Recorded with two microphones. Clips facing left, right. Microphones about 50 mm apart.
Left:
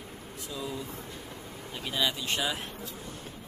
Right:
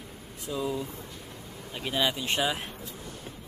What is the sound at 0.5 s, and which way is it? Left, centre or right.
Speech, centre.